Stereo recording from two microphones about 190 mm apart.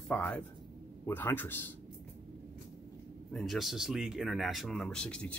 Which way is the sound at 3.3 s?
Centre (ahead or behind).